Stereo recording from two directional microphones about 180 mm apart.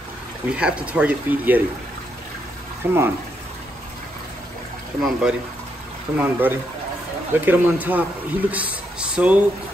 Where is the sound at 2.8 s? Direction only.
10° right (ahead or behind).